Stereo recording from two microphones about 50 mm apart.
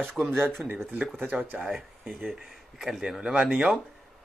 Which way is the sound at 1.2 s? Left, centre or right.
Right.